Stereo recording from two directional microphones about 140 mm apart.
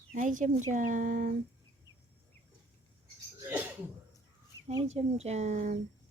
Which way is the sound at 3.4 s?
15° right (ahead or behind).